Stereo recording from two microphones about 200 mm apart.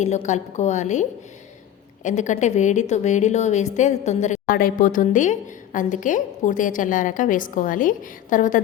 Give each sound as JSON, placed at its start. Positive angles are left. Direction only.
{"t": 0.0, "sound": "a woman's voice", "side_deg": 35}
{"t": 2.0, "sound": "a woman's voice", "side_deg": 35}